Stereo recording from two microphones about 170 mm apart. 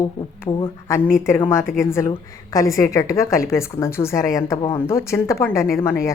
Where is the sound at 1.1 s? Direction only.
15° left (ahead or behind).